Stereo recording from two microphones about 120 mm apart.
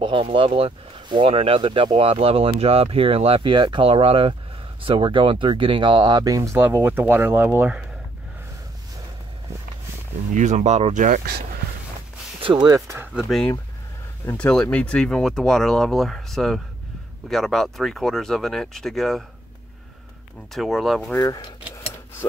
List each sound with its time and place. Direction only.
0.0 s speech: 50° right (ahead or behind); by 7.8 s 15° right (ahead or behind)
10.3 s speech: 90° right
12.4 s speech: 40° right (ahead or behind); by 13.1 s 25° right (ahead or behind)
13.1 s speech: centre (ahead or behind)
20.5 s speech: centre (ahead or behind)
21.2 s speech: 35° left (ahead or behind)